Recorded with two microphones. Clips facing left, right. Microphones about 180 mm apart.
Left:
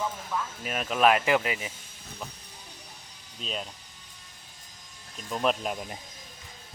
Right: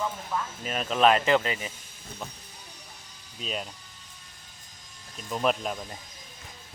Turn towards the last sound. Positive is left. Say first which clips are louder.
# left 1 dB
turn(degrees=15)  # may be behind; listen again after turning